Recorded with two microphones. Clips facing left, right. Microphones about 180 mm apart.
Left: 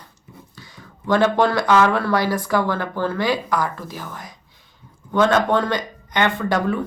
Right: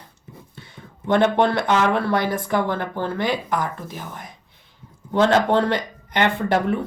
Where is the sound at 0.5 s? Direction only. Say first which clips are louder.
Right 1 dB; 25° right (ahead or behind).